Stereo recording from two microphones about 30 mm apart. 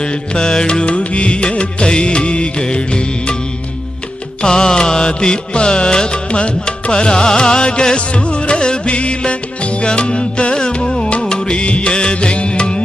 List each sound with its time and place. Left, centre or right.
0.0 s music: left
4.4 s music: left
11.6 s music: left
11.9 s music: left